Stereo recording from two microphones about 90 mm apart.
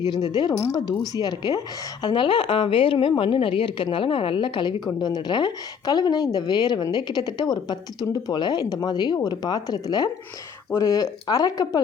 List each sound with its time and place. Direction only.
0.0 s a woman's voice: 55° left (ahead or behind)